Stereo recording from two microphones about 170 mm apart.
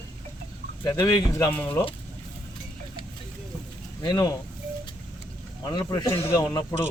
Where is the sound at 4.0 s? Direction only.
25° left (ahead or behind).